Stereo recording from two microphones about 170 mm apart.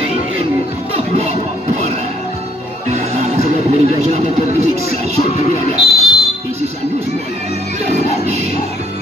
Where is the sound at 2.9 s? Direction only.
40° right (ahead or behind).